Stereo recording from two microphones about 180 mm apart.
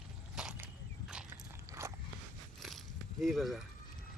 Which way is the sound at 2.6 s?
Centre (ahead or behind).